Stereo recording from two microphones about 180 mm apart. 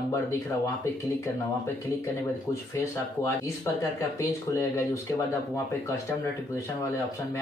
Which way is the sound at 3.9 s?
15° left (ahead or behind).